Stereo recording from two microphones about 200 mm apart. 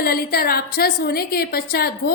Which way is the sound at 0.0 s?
50° left (ahead or behind).